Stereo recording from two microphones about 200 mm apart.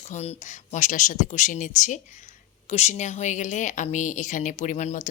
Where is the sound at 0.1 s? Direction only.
35° left (ahead or behind).